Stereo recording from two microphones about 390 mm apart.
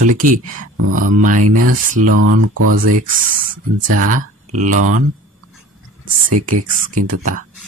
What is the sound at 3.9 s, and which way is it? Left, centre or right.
Speech, centre.